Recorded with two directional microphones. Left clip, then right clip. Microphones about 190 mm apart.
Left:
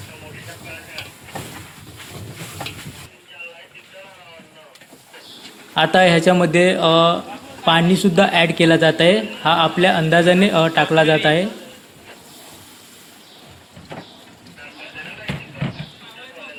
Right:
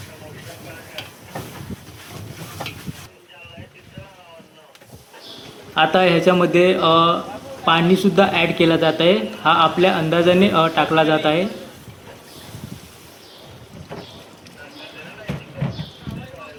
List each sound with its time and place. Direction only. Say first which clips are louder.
5.7 s speech: left 2 dB; 45° left (ahead or behind)